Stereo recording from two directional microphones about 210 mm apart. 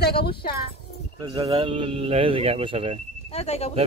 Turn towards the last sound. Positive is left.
turn(degrees=30)  # may be behind; listen again after turning